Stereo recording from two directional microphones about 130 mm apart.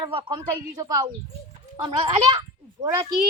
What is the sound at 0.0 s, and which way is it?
Speech, 40° right (ahead or behind).